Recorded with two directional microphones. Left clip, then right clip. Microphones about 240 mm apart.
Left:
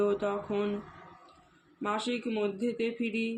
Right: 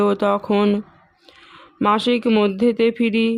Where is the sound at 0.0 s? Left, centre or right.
Right.